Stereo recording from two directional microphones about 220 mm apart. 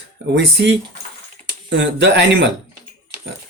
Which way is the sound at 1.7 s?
55° right (ahead or behind).